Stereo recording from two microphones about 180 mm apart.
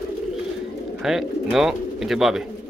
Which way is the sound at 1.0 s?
Centre (ahead or behind).